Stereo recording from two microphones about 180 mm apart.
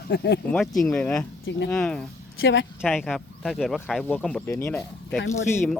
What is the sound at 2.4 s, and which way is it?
Speech, 90° left.